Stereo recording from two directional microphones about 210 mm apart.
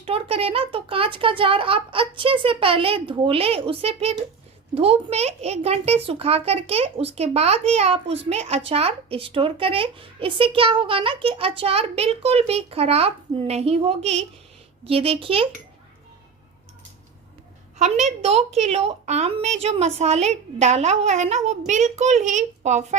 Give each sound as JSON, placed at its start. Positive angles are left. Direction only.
{"t": 0.0, "sound": "a child's voice", "side_deg": -25}
{"t": 17.7, "sound": "a woman's voice", "side_deg": -30}